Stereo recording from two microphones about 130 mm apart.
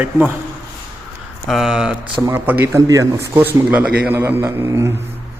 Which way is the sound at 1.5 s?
5° right (ahead or behind).